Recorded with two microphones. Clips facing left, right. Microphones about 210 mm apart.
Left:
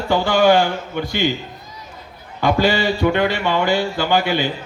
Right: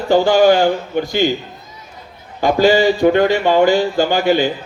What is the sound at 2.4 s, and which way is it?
Speech, 45° right (ahead or behind).